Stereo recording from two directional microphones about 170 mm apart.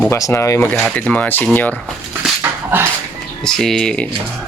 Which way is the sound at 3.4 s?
5° left (ahead or behind).